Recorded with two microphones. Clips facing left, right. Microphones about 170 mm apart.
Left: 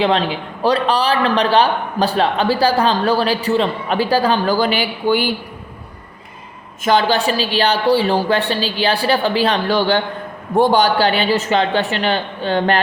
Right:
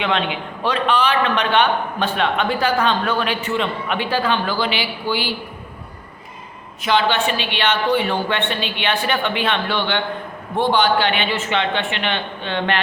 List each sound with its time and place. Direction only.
0.0 s a man's voice: 35° left (ahead or behind)
6.8 s a man's voice: 40° left (ahead or behind)